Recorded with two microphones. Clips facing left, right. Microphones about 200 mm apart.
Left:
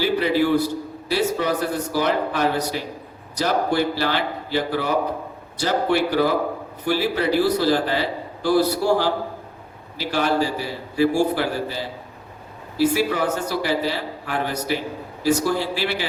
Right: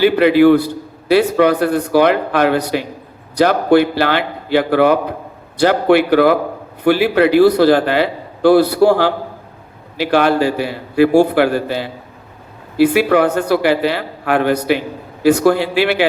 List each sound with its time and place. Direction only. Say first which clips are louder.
0.0 s a man's voice: right 10 dB; 65° right (ahead or behind)